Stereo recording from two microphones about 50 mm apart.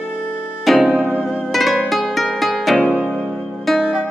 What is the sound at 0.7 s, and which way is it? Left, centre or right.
Music, centre.